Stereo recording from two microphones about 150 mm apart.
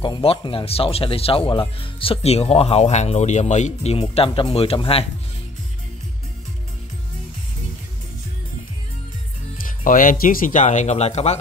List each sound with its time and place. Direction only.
0.0 s speech: 35° left (ahead or behind)
9.7 s speech: 65° left (ahead or behind); by 11.3 s 45° left (ahead or behind)